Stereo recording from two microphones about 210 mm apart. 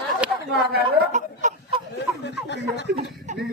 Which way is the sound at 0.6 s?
50° right (ahead or behind).